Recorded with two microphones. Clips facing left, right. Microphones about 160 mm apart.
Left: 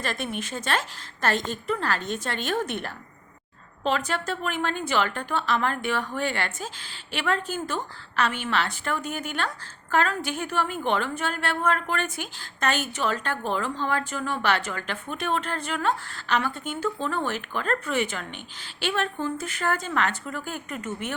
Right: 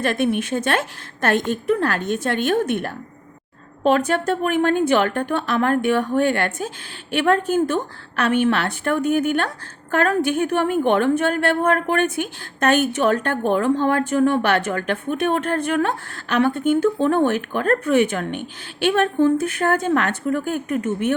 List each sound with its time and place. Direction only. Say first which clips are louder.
0.0 s a woman's voice: right 10 dB; 60° right (ahead or behind)